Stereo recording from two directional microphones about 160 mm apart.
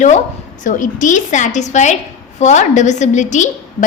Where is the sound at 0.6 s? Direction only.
55° left (ahead or behind).